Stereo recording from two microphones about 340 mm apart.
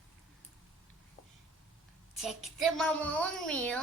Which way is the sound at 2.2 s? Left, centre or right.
Centre.